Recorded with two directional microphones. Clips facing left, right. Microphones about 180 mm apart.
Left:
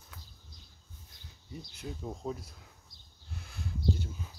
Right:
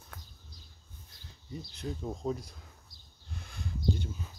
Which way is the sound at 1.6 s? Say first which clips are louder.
Right 3 dB; 10° left (ahead or behind).